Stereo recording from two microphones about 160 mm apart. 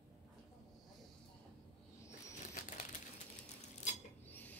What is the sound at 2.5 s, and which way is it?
Bird flight, 50° left (ahead or behind).